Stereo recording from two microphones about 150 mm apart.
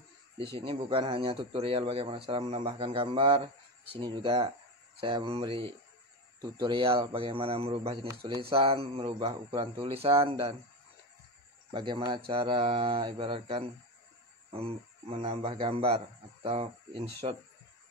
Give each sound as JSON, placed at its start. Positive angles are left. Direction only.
{"t": 0.4, "sound": "speech", "side_deg": -35}
{"t": 11.7, "sound": "speech", "side_deg": -30}